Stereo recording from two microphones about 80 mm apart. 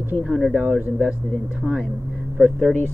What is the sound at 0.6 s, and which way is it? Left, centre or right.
Speech, centre.